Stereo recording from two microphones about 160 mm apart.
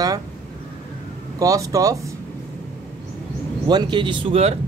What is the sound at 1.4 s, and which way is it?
Speech, 20° right (ahead or behind).